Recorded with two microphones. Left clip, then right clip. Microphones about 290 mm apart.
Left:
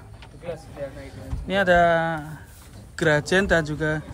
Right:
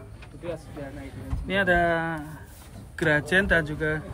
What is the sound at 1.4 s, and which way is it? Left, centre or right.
Speech, centre.